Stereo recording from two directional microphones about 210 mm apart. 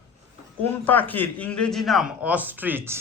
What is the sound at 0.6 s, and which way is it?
A man's voice, 10° left (ahead or behind).